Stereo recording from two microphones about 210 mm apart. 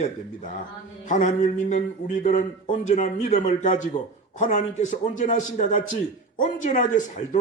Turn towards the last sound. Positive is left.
turn(degrees=35)  # may be behind; listen again after turning